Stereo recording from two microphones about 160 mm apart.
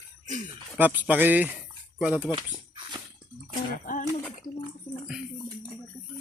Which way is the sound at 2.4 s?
25° right (ahead or behind).